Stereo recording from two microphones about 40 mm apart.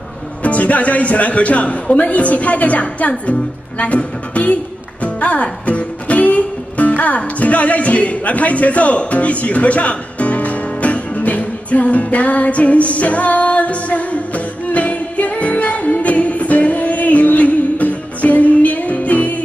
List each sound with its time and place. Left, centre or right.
0.4 s speech: left
5.0 s music: left